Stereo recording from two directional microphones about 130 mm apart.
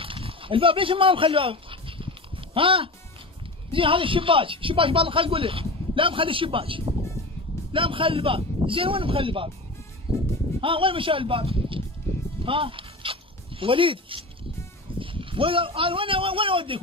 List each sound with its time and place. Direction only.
0.0 s pig: 45° right (ahead or behind)
3.7 s speech: 40° right (ahead or behind)
12.4 s a sound: 40° right (ahead or behind)
15.0 s a man's voice: 40° right (ahead or behind)